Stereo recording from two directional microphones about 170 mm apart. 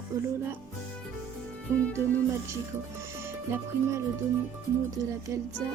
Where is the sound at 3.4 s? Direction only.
15° right (ahead or behind).